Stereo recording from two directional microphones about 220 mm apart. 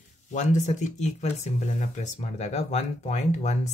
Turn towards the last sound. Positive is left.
turn(degrees=30)  # may be behind; listen again after turning